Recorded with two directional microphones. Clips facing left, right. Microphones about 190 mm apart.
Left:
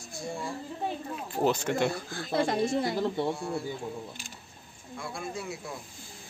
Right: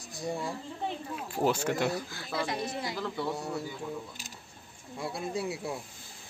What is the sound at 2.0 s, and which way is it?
Speech, 50° left (ahead or behind).